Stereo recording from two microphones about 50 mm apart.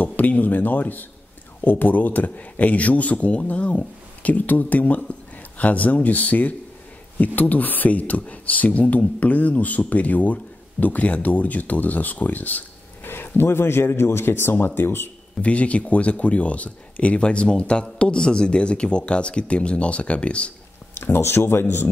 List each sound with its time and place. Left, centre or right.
0.0 s speech: left
13.3 s speech: left
15.4 s speech: left
20.9 s speech: left